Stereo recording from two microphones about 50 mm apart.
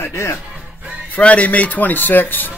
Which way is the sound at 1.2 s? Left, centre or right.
Left.